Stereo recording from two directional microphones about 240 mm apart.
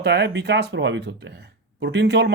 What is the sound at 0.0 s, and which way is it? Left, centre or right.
Speech, right.